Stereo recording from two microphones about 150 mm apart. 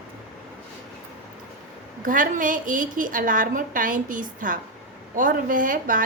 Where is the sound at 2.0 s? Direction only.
65° right (ahead or behind).